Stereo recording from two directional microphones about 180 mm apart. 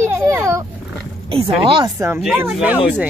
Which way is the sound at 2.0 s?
15° right (ahead or behind).